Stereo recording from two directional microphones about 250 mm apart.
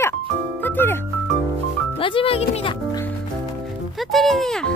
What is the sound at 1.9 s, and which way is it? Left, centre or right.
Music, left.